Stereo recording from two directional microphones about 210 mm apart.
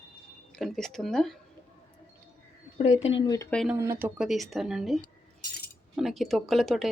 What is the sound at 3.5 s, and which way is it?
Speech, centre (ahead or behind).